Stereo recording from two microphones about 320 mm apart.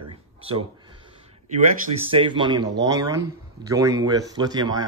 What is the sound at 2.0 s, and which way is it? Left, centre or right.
A man's voice, centre.